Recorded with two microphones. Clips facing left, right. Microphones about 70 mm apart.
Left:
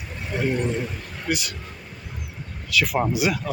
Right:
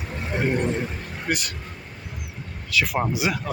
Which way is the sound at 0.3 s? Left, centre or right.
Right.